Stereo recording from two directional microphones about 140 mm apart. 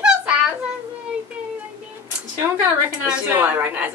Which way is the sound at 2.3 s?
15° right (ahead or behind).